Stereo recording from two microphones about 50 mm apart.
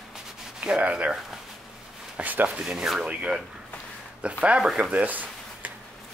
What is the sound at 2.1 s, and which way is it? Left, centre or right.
Speech, right.